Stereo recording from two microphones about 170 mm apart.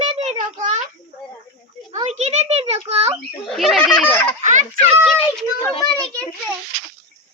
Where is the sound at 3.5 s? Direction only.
Centre (ahead or behind).